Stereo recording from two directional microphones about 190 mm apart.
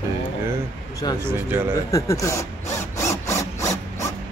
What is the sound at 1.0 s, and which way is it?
Speech, 25° left (ahead or behind).